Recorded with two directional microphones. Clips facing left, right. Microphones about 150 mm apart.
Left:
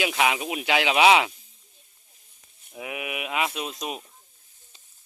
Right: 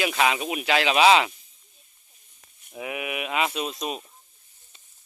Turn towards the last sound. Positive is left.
turn(degrees=15)  # may be behind; listen again after turning